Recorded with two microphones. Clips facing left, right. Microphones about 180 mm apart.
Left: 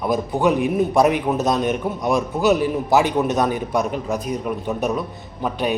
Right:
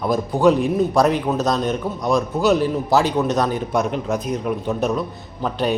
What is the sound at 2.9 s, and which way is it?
Speech, 20° left (ahead or behind).